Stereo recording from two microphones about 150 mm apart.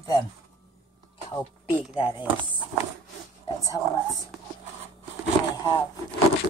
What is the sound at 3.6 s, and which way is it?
Speech, 20° left (ahead or behind).